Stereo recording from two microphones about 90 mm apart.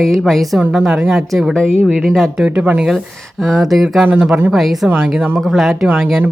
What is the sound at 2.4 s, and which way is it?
A woman's voice, 10° right (ahead or behind).